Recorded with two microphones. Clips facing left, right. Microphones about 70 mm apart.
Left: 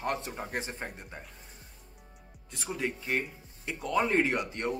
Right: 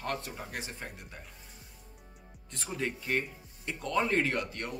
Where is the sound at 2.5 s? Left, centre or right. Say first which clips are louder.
Left 1 dB; centre.